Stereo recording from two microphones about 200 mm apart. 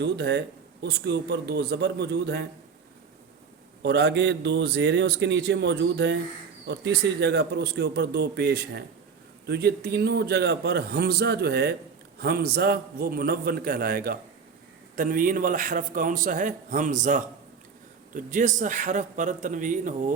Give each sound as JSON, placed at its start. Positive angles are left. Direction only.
{"t": 0.0, "sound": "speech", "side_deg": -60}
{"t": 3.8, "sound": "a man's voice", "side_deg": -60}